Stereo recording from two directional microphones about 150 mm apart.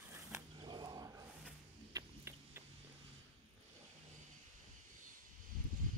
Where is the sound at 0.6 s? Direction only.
30° right (ahead or behind).